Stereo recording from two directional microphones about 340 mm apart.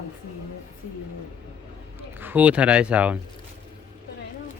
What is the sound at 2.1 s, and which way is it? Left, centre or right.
Speech, centre.